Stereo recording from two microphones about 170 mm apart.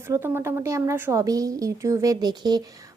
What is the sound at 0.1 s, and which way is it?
A woman's voice, 15° right (ahead or behind).